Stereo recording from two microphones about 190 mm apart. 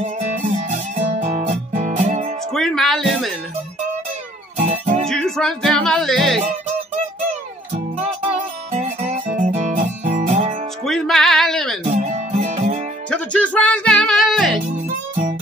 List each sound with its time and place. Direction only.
0.0 s music: 40° right (ahead or behind)
2.5 s music: centre (ahead or behind)
4.6 s music: 35° right (ahead or behind)
5.0 s music: centre (ahead or behind)
8.7 s music: 35° right (ahead or behind)
10.9 s music: centre (ahead or behind)
11.9 s music: 40° right (ahead or behind)
13.1 s music: 5° left (ahead or behind)